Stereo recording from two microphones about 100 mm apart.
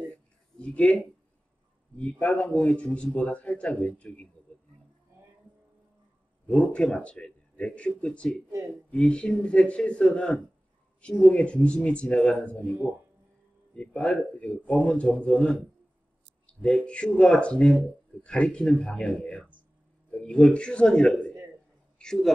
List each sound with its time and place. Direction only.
0.6 s a sound: 10° left (ahead or behind)
2.0 s speech: 15° left (ahead or behind)
6.4 s speech: 15° left (ahead or behind)
8.5 s speech: 30° right (ahead or behind)
8.9 s speech: 10° left (ahead or behind)
13.7 s a man's voice: 15° left (ahead or behind)